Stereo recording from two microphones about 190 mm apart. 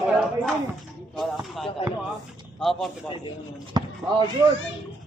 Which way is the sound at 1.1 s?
Centre (ahead or behind).